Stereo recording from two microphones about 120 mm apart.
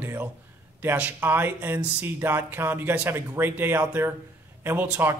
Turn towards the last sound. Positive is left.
turn(degrees=-20)  # may be behind; listen again after turning